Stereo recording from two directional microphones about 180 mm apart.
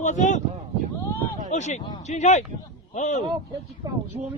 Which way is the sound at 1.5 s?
40° left (ahead or behind).